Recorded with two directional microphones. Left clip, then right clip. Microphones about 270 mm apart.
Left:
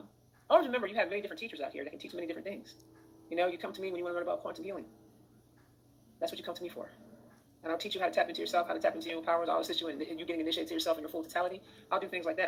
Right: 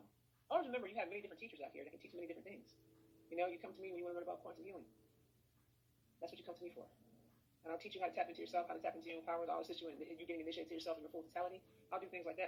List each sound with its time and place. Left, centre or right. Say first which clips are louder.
0.4 s speech: left 13 dB; left
6.1 s speech: left 14 dB; left